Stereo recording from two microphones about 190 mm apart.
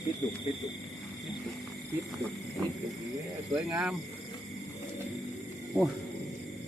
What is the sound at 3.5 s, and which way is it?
Speech, 5° right (ahead or behind).